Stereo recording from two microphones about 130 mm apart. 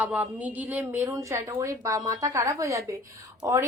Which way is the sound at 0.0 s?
10° right (ahead or behind).